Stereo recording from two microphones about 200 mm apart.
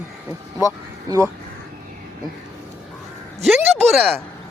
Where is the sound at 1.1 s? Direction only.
20° right (ahead or behind).